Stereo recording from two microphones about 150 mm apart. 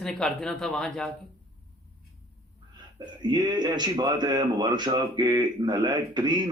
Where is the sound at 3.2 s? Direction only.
30° right (ahead or behind).